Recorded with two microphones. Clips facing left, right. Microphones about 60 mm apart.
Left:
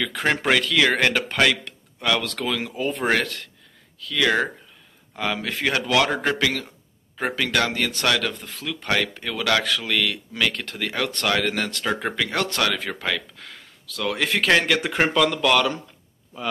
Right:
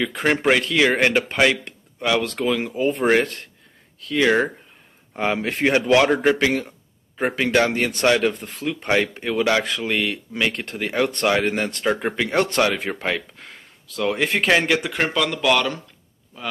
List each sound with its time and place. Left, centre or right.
0.4 s speech: right
4.0 s speech: right
14.9 s speech: centre